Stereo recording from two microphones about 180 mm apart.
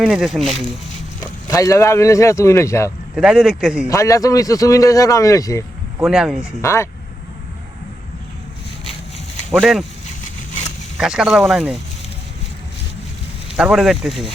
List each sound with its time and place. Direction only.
0.0 s speech: 5° right (ahead or behind)
1.2 s speech: 20° left (ahead or behind)
3.2 s speech: 5° right (ahead or behind)
3.8 s a man's voice: 20° left (ahead or behind)
6.0 s speech: 5° right (ahead or behind)
6.6 s a man's voice: 15° left (ahead or behind)
9.6 s speech: centre (ahead or behind)
10.9 s speech: 5° right (ahead or behind)
13.6 s speech: 5° right (ahead or behind)